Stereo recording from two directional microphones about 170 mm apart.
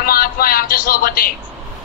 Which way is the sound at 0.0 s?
60° left (ahead or behind).